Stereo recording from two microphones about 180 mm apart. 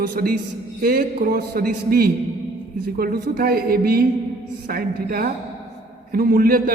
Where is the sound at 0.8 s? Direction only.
55° right (ahead or behind).